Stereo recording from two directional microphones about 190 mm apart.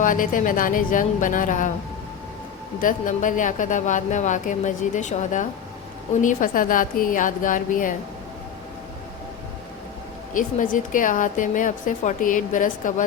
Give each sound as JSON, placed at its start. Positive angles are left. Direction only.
{"t": 0.0, "sound": "a woman's voice", "side_deg": 45}
{"t": 2.8, "sound": "a woman's voice", "side_deg": 45}
{"t": 10.3, "sound": "a woman's voice", "side_deg": 45}